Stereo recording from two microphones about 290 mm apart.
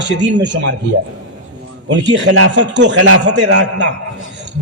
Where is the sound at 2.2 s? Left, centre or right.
Right.